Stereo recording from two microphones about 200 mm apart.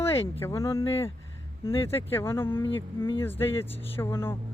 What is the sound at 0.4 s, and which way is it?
Speech, 15° left (ahead or behind).